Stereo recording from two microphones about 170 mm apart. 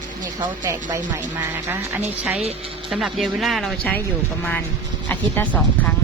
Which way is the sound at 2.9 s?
Centre (ahead or behind).